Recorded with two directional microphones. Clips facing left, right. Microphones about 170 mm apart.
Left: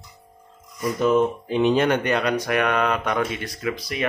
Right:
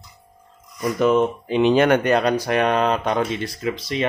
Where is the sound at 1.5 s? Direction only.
85° right.